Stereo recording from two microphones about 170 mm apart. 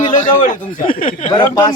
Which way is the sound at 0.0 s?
50° left (ahead or behind).